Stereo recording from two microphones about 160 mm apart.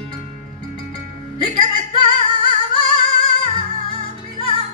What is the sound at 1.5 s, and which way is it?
Music, 30° left (ahead or behind).